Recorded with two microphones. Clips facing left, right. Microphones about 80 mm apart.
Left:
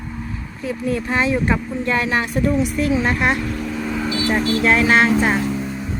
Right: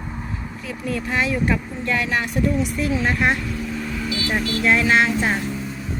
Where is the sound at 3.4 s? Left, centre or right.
Left.